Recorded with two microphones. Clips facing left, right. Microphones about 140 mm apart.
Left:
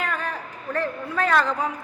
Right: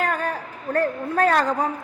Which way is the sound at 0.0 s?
45° right (ahead or behind).